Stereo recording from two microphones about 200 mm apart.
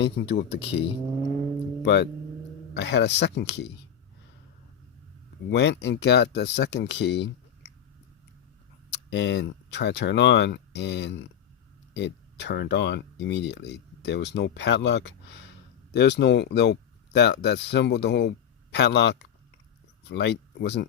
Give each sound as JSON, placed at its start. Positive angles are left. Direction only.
{"t": 0.0, "sound": "speech", "side_deg": 55}
{"t": 5.5, "sound": "speech", "side_deg": 60}
{"t": 8.9, "sound": "speech", "side_deg": 60}